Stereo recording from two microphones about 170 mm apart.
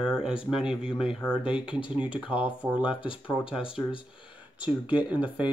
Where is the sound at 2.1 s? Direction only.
30° left (ahead or behind).